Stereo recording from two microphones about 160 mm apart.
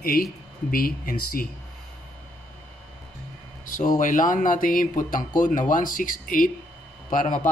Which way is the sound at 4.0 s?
55° left (ahead or behind).